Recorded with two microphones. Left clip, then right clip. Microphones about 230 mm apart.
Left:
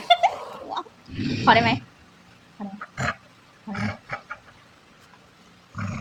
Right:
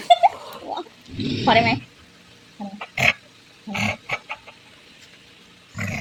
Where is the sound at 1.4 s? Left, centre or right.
Centre.